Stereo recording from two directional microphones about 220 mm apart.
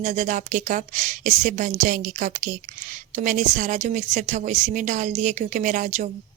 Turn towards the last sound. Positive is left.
turn(degrees=-35)  # may be behind; listen again after turning